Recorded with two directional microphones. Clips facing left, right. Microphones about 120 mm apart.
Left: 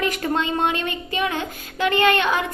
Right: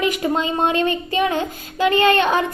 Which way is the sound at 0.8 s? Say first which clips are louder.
Right 6 dB; 30° right (ahead or behind).